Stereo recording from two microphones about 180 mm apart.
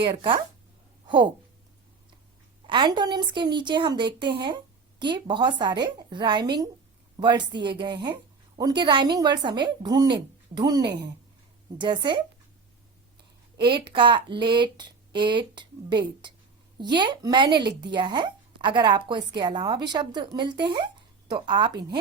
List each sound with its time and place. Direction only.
0.2 s speech: 30° right (ahead or behind)
2.6 s speech: 25° right (ahead or behind)
13.6 s speech: 25° right (ahead or behind)